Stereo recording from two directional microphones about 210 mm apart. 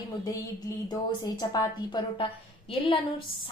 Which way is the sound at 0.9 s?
20° left (ahead or behind).